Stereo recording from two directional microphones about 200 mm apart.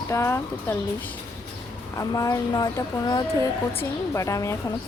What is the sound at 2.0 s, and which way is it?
A woman's voice, 15° left (ahead or behind).